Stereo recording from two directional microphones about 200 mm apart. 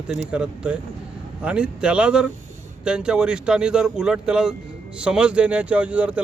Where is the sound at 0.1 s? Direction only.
5° right (ahead or behind).